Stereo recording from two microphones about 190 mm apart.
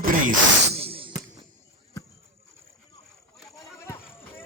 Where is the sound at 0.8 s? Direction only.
30° right (ahead or behind).